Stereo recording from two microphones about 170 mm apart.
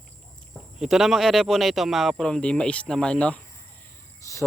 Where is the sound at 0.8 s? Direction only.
Centre (ahead or behind).